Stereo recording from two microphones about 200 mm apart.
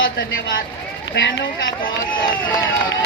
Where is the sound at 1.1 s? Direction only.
65° left (ahead or behind).